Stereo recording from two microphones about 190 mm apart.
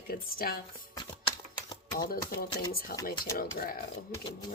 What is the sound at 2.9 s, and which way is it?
Speech, 55° left (ahead or behind).